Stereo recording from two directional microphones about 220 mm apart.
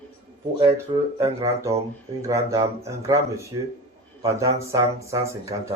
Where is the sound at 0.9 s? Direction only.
20° right (ahead or behind).